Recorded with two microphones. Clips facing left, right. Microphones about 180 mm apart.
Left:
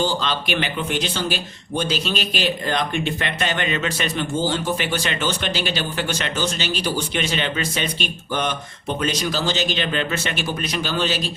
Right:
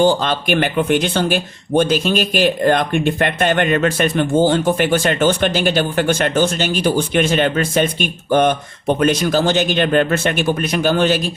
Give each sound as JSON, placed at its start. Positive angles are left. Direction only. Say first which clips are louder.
{"t": 0.0, "sound": "speech", "louder": "right 8 dB", "side_deg": -55}